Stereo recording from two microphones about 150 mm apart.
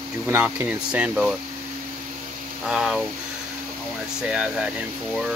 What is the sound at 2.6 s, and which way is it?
Speech, 5° right (ahead or behind).